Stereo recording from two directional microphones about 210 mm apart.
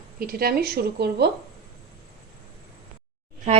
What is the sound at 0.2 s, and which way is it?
A woman's voice, 45° right (ahead or behind).